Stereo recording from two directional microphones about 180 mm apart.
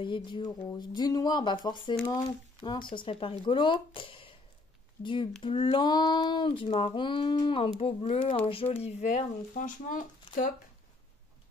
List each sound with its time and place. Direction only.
0.0 s speech: 25° left (ahead or behind)
2.6 s speech: 25° left (ahead or behind); by 10.5 s 50° left (ahead or behind)